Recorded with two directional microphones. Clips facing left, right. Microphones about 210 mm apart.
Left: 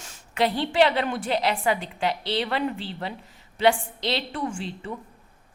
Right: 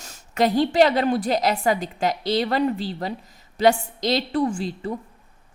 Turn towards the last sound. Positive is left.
turn(degrees=-35)  # may be behind; listen again after turning